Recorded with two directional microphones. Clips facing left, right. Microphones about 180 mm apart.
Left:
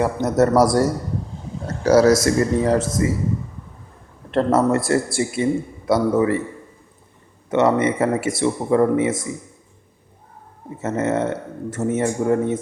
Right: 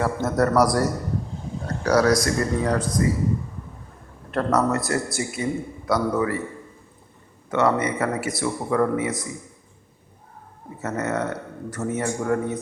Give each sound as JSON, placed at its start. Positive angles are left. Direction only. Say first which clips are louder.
{"t": 0.0, "sound": "a man's voice", "louder": "left 4 dB", "side_deg": 20}
{"t": 4.3, "sound": "a man's voice", "louder": "left 4 dB", "side_deg": 25}
{"t": 7.5, "sound": "a man's voice", "louder": "left 4 dB", "side_deg": 25}
{"t": 10.8, "sound": "a man's voice", "louder": "left 5 dB", "side_deg": 25}